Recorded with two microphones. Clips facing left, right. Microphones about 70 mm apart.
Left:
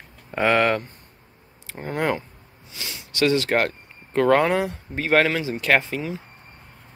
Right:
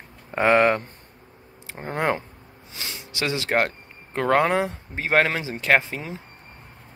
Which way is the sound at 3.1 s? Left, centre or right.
Right.